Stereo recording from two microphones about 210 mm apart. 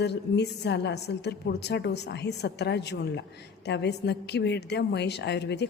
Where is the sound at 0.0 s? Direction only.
55° left (ahead or behind).